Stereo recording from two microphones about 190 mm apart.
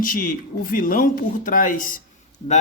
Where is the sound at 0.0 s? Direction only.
50° left (ahead or behind).